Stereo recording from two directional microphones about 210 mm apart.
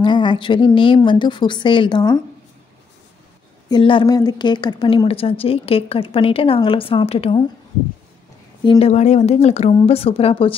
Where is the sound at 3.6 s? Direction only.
20° left (ahead or behind).